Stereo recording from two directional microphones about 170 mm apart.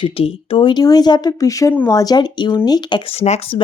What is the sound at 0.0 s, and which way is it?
A woman's voice, 30° left (ahead or behind).